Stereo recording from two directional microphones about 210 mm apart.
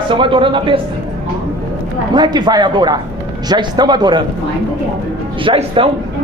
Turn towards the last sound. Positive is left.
turn(degrees=-25)  # may be behind; listen again after turning